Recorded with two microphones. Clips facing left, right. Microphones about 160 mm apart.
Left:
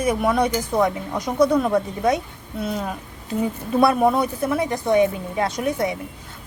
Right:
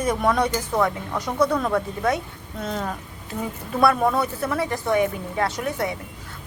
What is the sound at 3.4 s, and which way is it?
A woman's voice, 20° left (ahead or behind).